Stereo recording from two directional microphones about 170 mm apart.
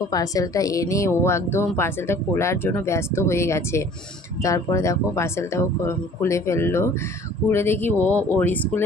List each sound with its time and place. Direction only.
0.1 s speech: 20° left (ahead or behind)